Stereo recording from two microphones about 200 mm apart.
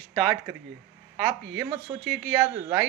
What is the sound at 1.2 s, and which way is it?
A woman's voice, 15° right (ahead or behind).